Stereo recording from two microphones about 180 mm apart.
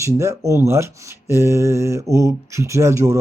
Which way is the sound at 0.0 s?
15° right (ahead or behind).